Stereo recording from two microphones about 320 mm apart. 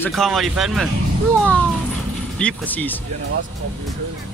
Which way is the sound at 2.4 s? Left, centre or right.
Centre.